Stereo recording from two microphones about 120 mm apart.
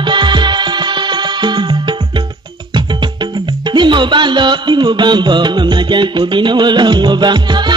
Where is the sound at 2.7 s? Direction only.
40° right (ahead or behind).